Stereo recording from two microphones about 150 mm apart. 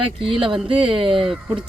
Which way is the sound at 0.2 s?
35° right (ahead or behind).